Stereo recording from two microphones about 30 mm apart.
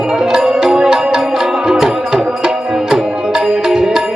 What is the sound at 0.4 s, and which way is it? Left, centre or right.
Music, centre.